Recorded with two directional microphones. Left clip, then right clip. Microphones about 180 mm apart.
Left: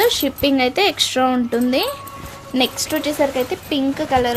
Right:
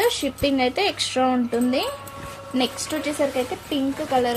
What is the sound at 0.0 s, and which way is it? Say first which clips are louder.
A woman's voice: left 5 dB; 40° left (ahead or behind).